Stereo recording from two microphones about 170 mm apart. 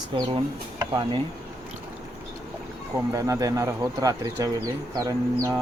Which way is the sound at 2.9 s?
20° right (ahead or behind).